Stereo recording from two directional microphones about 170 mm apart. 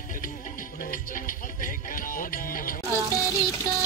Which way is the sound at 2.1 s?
55° left (ahead or behind).